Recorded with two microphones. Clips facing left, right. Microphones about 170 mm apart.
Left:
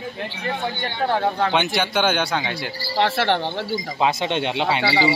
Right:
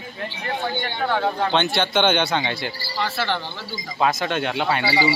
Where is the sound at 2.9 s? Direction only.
75° left (ahead or behind).